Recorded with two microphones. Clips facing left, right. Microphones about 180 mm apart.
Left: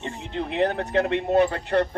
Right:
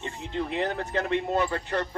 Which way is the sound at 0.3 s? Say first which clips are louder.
Left 4 dB; 65° left (ahead or behind).